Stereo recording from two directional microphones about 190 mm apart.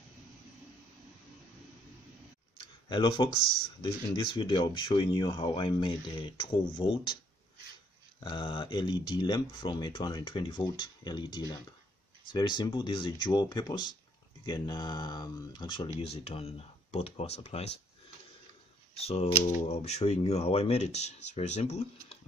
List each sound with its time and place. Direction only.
2.5 s a sound: 25° left (ahead or behind)
3.8 s speech: 25° left (ahead or behind)
8.2 s speech: 25° left (ahead or behind)
18.9 s speech: 30° left (ahead or behind)